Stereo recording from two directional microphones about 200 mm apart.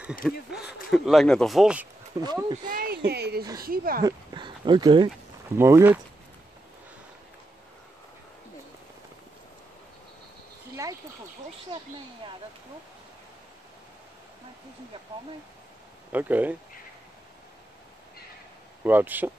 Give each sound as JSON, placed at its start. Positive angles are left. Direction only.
{"t": 0.2, "sound": "speech", "side_deg": 0}
{"t": 2.1, "sound": "speech", "side_deg": -20}
{"t": 2.7, "sound": "a sound", "side_deg": -50}
{"t": 3.1, "sound": "speech", "side_deg": -55}
{"t": 4.0, "sound": "speech", "side_deg": -20}
{"t": 5.6, "sound": "speech", "side_deg": -15}
{"t": 10.8, "sound": "speech", "side_deg": -15}
{"t": 16.1, "sound": "speech", "side_deg": -10}
{"t": 18.9, "sound": "speech", "side_deg": -10}